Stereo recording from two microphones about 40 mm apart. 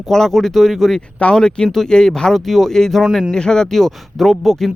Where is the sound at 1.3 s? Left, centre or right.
Centre.